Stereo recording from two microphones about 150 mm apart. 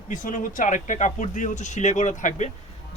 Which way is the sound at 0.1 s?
60° left (ahead or behind).